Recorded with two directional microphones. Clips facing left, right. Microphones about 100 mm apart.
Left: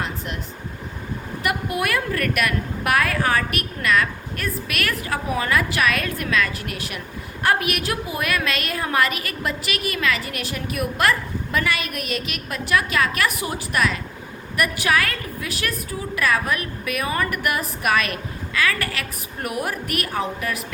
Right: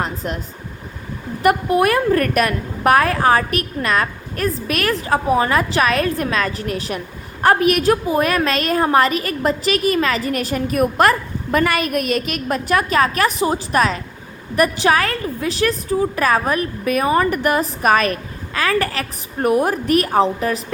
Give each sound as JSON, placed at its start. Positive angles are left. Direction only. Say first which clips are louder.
{"t": 1.4, "sound": "a woman's voice", "louder": "right 9 dB", "side_deg": -40}